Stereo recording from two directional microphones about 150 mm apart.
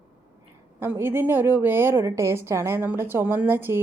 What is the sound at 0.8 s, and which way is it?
A woman's voice, 15° right (ahead or behind).